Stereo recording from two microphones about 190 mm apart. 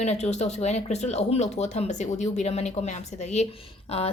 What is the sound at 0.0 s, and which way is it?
A woman's voice, 35° left (ahead or behind).